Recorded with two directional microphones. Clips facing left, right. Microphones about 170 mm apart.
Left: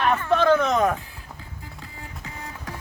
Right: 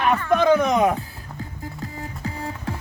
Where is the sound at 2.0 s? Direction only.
35° right (ahead or behind).